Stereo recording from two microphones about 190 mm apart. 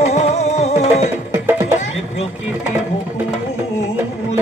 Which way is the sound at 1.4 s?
10° right (ahead or behind).